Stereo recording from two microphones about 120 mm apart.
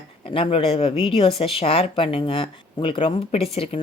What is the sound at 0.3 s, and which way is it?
Speech, 50° left (ahead or behind).